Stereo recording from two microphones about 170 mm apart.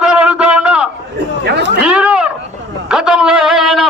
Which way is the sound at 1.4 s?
90° right.